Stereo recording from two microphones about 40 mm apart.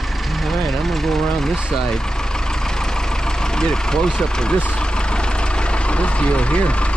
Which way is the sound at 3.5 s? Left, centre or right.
Centre.